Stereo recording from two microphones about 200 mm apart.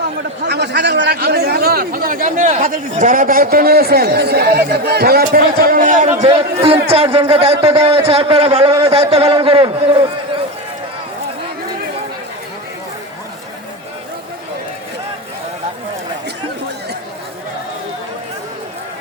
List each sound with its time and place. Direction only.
0.4 s a man's voice: 55° right (ahead or behind)
6.2 s a man's voice: 30° right (ahead or behind)